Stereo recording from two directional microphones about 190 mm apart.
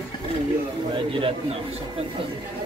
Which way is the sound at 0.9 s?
25° right (ahead or behind).